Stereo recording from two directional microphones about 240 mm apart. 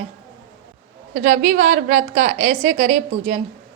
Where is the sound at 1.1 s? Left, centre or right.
Right.